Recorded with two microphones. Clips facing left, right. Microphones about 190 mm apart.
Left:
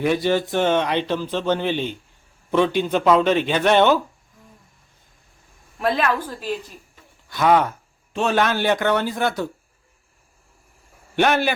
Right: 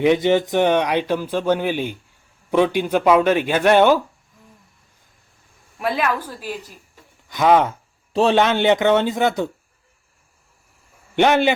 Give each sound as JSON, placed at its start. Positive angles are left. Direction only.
{"t": 0.0, "sound": "speech", "side_deg": -20}
{"t": 5.8, "sound": "speech", "side_deg": -10}
{"t": 8.1, "sound": "speech", "side_deg": -30}
{"t": 11.2, "sound": "speech", "side_deg": -20}